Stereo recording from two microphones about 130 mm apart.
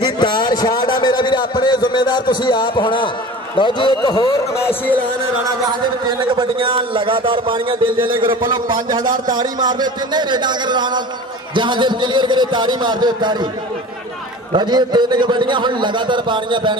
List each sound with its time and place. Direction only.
0.0 s a sound: 35° left (ahead or behind)
3.5 s a man's voice: 35° left (ahead or behind)
5.7 s a man's voice: 35° right (ahead or behind)
14.5 s a man's voice: 35° right (ahead or behind)